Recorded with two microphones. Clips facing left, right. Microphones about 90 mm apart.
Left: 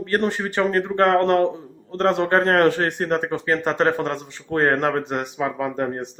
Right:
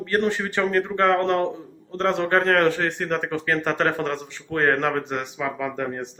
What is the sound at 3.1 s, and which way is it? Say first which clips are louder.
Speech: left 2 dB; 35° left (ahead or behind).